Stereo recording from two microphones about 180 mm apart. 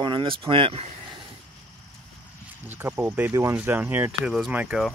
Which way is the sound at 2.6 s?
10° right (ahead or behind).